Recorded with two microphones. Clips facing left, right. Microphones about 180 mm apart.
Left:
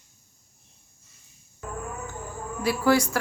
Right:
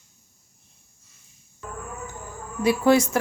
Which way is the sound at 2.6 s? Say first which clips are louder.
Right 4 dB; 20° right (ahead or behind).